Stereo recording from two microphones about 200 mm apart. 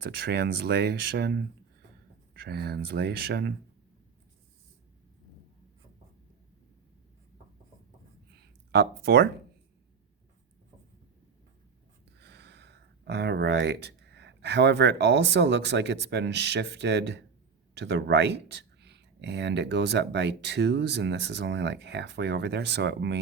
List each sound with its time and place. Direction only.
0.0 s speech: 55° right (ahead or behind)
8.4 s a sound: 55° right (ahead or behind)
12.2 s speech: 55° right (ahead or behind)